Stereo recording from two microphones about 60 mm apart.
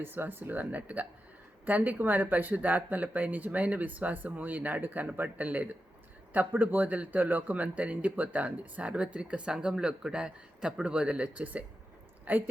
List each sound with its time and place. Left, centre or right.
0.0 s speech: right